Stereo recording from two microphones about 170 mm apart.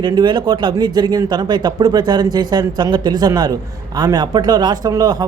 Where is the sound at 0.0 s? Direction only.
25° right (ahead or behind).